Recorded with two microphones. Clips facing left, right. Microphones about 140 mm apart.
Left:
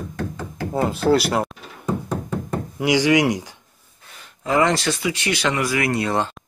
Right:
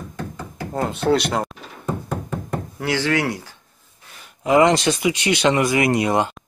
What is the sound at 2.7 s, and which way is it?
Speech, 15° left (ahead or behind).